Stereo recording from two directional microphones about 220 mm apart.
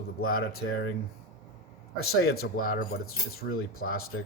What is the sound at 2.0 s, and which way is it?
Speech, 45° left (ahead or behind).